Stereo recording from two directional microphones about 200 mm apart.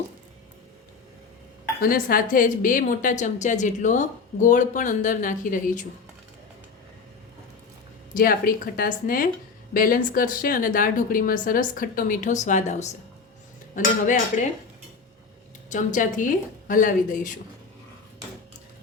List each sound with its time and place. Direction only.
1.8 s a woman's voice: 45° left (ahead or behind)
8.1 s a woman's voice: 45° left (ahead or behind)
15.7 s a woman's voice: 40° left (ahead or behind)